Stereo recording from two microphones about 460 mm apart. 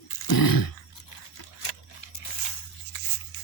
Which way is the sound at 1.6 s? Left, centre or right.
Left.